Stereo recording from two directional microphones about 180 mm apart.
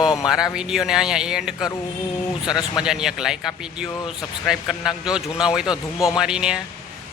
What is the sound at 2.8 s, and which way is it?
A man's voice, 5° right (ahead or behind).